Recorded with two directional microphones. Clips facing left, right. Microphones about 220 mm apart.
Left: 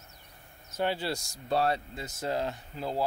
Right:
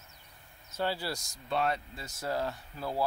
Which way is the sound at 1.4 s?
35° left (ahead or behind).